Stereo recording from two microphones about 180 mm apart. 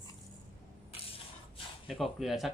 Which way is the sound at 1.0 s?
30° left (ahead or behind).